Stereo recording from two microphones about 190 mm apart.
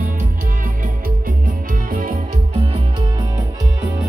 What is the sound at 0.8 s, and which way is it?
Music, 45° right (ahead or behind).